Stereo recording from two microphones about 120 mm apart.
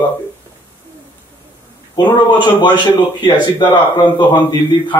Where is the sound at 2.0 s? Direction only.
40° left (ahead or behind).